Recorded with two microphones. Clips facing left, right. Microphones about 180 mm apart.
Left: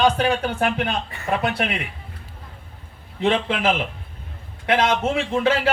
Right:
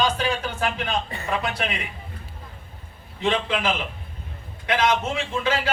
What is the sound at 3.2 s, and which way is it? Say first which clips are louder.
Speech: left 3 dB; 55° left (ahead or behind).